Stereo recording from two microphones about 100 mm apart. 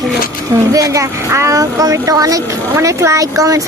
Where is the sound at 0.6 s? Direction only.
35° right (ahead or behind).